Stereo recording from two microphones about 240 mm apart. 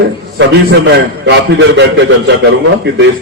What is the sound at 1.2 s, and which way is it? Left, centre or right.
A man's voice, right.